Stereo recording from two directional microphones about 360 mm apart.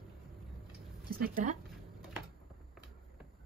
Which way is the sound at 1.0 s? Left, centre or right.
Right.